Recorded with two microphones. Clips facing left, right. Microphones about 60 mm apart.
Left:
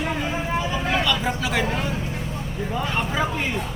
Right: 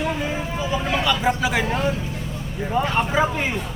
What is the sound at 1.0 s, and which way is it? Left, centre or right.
Speech, centre.